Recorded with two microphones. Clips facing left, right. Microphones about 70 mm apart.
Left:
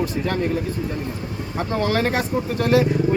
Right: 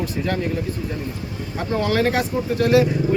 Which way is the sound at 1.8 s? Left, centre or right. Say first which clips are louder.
Right 2 dB; left.